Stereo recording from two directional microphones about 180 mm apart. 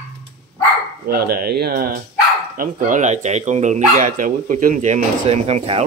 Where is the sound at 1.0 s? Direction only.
60° right (ahead or behind); by 5.8 s 35° right (ahead or behind).